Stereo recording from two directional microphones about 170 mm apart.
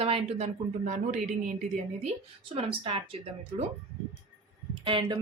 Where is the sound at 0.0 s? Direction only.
35° right (ahead or behind).